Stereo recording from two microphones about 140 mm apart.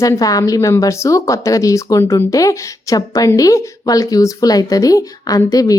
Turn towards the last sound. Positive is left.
turn(degrees=25)  # may be behind; listen again after turning